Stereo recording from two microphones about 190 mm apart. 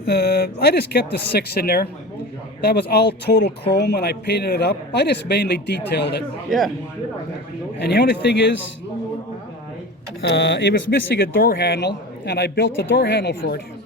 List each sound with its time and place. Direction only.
0.0 s speech: 60° left (ahead or behind)
7.8 s speech: 65° left (ahead or behind)
10.2 s speech: 70° left (ahead or behind)
11.1 s speech: 50° left (ahead or behind)